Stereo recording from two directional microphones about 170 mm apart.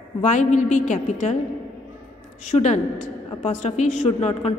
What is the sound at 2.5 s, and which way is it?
A woman's voice, 45° left (ahead or behind).